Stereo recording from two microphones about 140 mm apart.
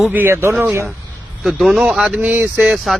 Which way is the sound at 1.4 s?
Centre (ahead or behind).